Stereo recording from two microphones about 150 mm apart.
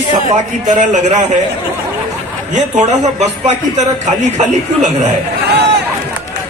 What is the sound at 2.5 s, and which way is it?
A man's voice, 50° right (ahead or behind).